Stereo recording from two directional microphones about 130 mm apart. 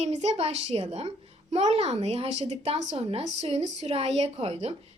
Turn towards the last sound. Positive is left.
turn(degrees=-50)  # may be behind; listen again after turning